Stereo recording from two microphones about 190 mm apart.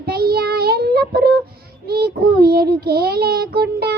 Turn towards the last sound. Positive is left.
turn(degrees=-55)  # may be behind; listen again after turning